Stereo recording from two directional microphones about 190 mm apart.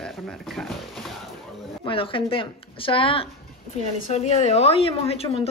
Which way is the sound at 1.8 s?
30° left (ahead or behind).